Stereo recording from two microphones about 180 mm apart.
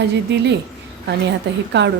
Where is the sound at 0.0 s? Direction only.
70° right (ahead or behind).